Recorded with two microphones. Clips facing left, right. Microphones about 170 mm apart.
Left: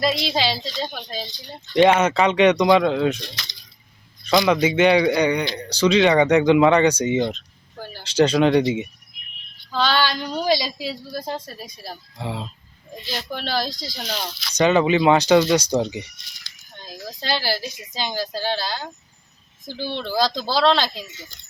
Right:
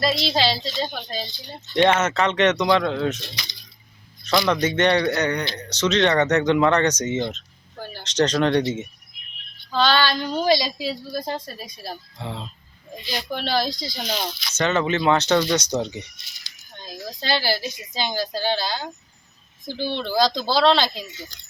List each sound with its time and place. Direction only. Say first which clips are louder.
0.2 s a man's voice: right 1 dB; 10° left (ahead or behind)
1.7 s a man's voice: left 3 dB; 10° left (ahead or behind)
4.3 s a man's voice: left 3 dB; 10° left (ahead or behind)
17.1 s a man's voice: right 1 dB; 5° left (ahead or behind)